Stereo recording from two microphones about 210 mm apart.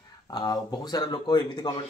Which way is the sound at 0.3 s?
20° left (ahead or behind).